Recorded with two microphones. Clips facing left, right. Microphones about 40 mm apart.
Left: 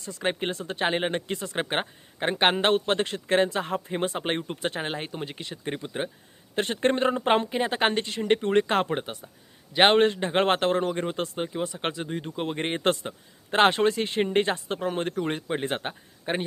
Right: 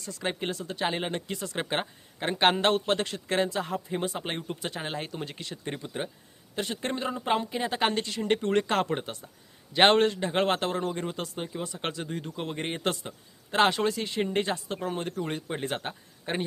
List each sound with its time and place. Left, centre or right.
0.0 s speech: left
6.6 s a man's voice: left; by 10.0 s centre
10.0 s speech: left